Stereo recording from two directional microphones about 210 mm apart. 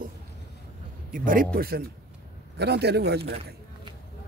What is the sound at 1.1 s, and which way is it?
Speech, 40° right (ahead or behind).